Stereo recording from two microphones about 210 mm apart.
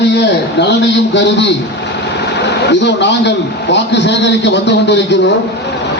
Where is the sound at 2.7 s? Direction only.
55° left (ahead or behind).